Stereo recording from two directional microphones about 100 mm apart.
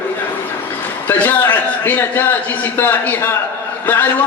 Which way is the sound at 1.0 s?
20° left (ahead or behind).